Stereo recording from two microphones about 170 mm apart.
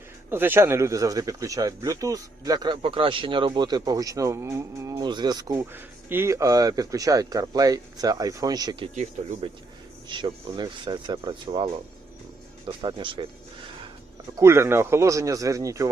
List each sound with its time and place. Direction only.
0.3 s speech: 10° right (ahead or behind)
10.1 s speech: 30° right (ahead or behind)
12.8 s speech: 30° right (ahead or behind)
14.3 s speech: 15° right (ahead or behind)